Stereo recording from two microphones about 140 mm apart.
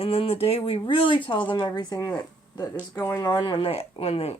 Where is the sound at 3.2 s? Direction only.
30° left (ahead or behind).